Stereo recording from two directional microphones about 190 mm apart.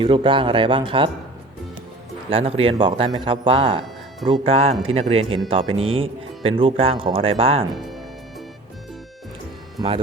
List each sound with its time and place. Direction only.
0.0 s speech: 25° right (ahead or behind)
2.3 s speech: 30° right (ahead or behind)
9.8 s speech: 20° right (ahead or behind)